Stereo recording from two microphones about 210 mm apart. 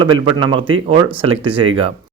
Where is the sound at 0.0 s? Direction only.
20° right (ahead or behind).